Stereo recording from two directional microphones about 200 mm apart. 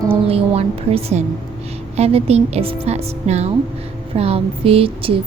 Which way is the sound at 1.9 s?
30° right (ahead or behind).